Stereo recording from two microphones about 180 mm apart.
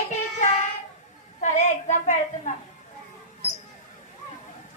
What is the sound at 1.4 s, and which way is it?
A woman's voice, 40° left (ahead or behind).